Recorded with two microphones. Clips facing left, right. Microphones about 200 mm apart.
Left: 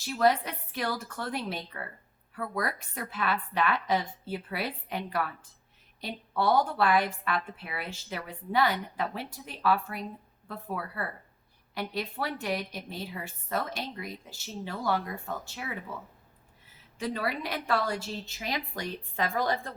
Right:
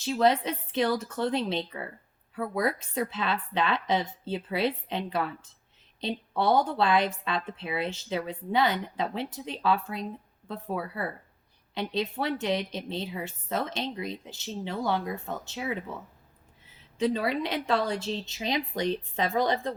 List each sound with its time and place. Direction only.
0.0 s a woman's voice: 20° right (ahead or behind)
17.0 s a woman's voice: 20° right (ahead or behind)